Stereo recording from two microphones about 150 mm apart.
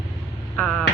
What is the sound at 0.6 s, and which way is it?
Vehicle, 5° left (ahead or behind).